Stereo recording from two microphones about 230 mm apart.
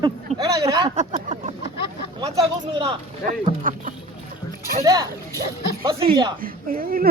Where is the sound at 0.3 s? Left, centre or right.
Centre.